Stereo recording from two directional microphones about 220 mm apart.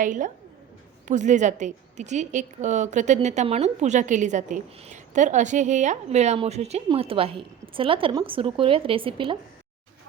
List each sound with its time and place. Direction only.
0.0 s a woman's voice: 35° right (ahead or behind)